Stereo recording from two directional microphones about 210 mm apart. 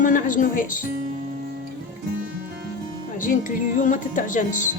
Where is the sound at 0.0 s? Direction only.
40° left (ahead or behind).